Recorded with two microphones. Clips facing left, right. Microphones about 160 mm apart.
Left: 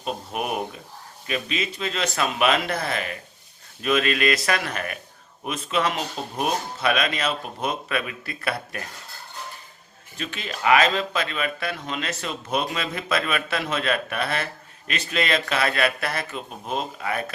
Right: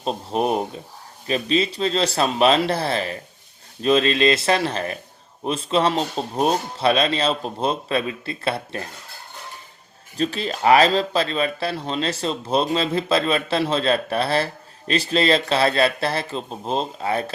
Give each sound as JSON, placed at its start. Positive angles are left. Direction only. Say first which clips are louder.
{"t": 0.0, "sound": "speech", "louder": "right 6 dB", "side_deg": -30}
{"t": 10.2, "sound": "speech", "louder": "right 9 dB", "side_deg": -35}